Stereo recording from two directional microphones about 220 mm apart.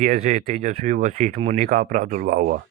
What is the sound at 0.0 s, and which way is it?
Speech, 35° right (ahead or behind).